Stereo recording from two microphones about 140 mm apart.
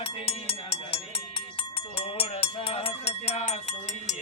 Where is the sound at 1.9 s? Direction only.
45° left (ahead or behind).